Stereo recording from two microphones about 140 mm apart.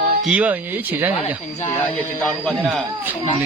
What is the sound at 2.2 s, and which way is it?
Speech, 5° left (ahead or behind).